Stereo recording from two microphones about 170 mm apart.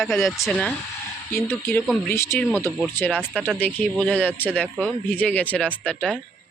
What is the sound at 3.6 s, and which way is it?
Speech, 10° left (ahead or behind).